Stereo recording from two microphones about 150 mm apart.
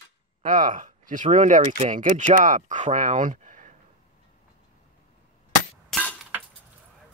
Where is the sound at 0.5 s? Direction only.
60° right (ahead or behind).